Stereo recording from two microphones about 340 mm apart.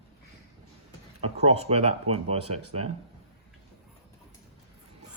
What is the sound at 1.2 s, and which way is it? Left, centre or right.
Speech, centre.